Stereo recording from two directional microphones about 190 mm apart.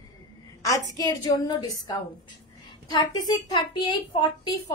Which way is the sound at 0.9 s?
20° left (ahead or behind).